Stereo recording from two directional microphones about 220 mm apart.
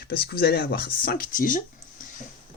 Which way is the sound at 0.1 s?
45° left (ahead or behind).